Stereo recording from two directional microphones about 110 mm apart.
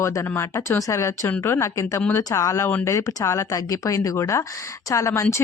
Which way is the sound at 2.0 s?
15° left (ahead or behind).